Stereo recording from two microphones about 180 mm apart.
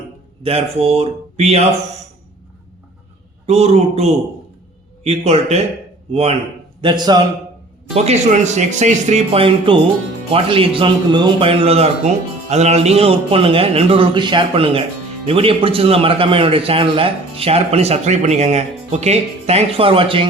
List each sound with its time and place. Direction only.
0.4 s a man's voice: 35° right (ahead or behind)
3.4 s a man's voice: 35° right (ahead or behind)
6.8 s a man's voice: 25° right (ahead or behind)
7.9 s a man's voice: 35° right (ahead or behind)